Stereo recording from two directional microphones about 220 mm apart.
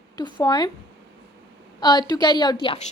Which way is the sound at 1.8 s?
20° left (ahead or behind).